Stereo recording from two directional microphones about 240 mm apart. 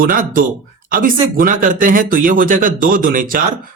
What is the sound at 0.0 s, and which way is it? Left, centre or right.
Speech, right.